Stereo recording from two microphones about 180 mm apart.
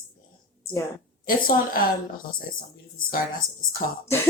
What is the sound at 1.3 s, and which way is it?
Speech, 50° left (ahead or behind).